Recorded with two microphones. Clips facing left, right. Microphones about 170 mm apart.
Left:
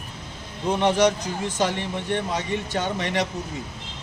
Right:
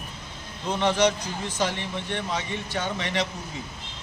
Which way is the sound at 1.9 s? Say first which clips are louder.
Left 4 dB; 50° left (ahead or behind).